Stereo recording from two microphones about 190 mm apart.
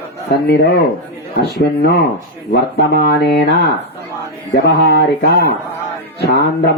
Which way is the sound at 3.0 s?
60° left (ahead or behind).